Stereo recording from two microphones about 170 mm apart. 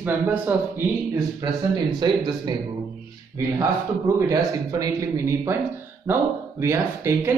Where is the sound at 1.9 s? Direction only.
25° right (ahead or behind).